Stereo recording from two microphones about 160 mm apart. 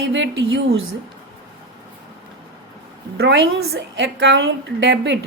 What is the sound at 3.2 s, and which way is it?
A woman's voice, 90° right.